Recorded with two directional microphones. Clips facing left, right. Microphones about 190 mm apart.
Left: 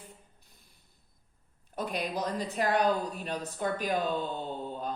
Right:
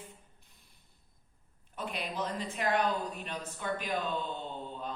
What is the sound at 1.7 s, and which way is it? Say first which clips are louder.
Speech: left 5 dB; 40° left (ahead or behind).